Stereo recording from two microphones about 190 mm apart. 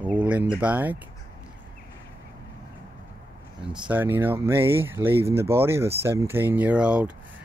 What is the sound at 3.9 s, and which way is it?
Speech, 10° right (ahead or behind).